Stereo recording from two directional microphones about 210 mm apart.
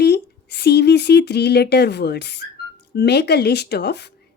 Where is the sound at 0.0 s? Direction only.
50° left (ahead or behind).